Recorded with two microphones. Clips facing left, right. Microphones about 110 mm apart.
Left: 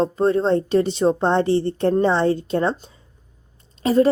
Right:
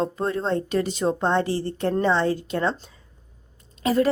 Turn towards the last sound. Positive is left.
turn(degrees=30)  # may be behind; listen again after turning